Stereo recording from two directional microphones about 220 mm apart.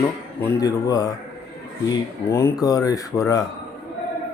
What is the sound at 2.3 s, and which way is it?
Speech, 10° left (ahead or behind).